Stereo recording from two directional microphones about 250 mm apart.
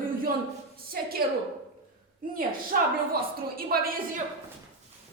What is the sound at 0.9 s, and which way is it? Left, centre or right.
Speech, right.